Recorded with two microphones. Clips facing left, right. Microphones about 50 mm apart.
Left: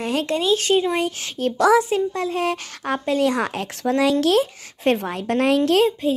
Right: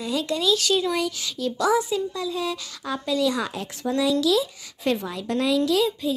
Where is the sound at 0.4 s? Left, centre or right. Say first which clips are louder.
Left 3 dB; left.